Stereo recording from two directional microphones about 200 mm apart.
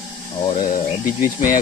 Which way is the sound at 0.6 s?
40° left (ahead or behind).